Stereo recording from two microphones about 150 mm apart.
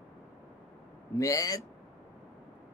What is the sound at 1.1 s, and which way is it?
Speech, 20° left (ahead or behind).